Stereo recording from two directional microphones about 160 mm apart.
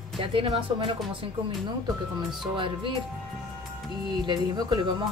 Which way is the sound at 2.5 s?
30° right (ahead or behind).